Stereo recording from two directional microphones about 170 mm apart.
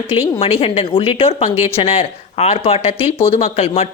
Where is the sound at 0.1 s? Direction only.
35° left (ahead or behind).